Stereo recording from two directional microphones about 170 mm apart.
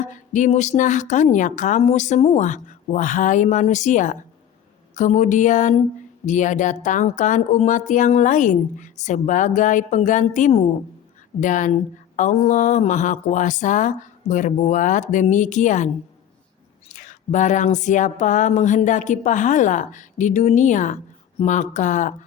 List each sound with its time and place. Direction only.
0.1 s a woman's voice: 45° left (ahead or behind)
16.9 s a woman's voice: 45° left (ahead or behind)